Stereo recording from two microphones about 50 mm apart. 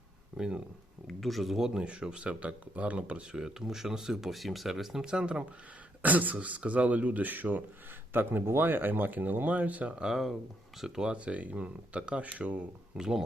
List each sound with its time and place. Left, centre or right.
0.3 s speech: centre
1.0 s speech: centre; by 3.2 s right
3.3 s speech: centre
6.0 s speech: right
9.9 s speech: centre
11.1 s speech: right
13.0 s speech: centre